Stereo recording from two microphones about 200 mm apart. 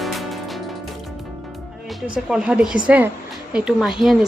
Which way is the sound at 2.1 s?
5° right (ahead or behind).